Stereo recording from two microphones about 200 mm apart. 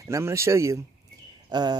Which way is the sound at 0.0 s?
15° right (ahead or behind).